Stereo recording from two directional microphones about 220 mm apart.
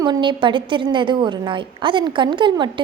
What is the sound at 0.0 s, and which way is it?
A woman's voice, 20° right (ahead or behind).